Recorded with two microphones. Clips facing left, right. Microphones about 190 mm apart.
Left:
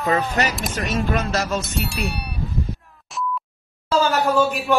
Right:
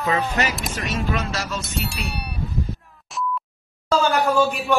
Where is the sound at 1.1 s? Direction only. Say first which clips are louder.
Left 4 dB; 50° left (ahead or behind).